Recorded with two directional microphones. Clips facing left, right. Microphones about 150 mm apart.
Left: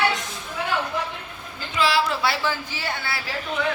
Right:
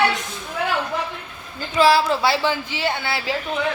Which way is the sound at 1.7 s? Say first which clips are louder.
Right 6 dB; 40° right (ahead or behind).